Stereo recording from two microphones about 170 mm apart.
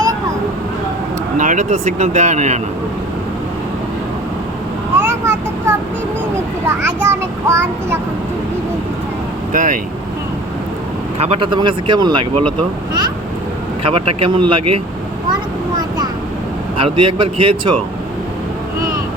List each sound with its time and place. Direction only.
1.4 s speech: 50° right (ahead or behind)
4.9 s child singing: 15° right (ahead or behind)
6.7 s a child's voice: 15° right (ahead or behind)
9.5 s speech: 50° right (ahead or behind)
11.2 s speech: 35° right (ahead or behind)
13.8 s speech: 30° right (ahead or behind)
16.7 s speech: 30° right (ahead or behind)